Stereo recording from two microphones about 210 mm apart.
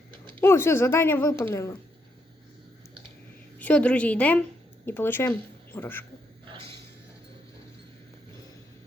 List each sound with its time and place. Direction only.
0.3 s a woman's voice: 10° left (ahead or behind)
3.6 s a woman's voice: 5° left (ahead or behind)
6.4 s a sound: 25° right (ahead or behind)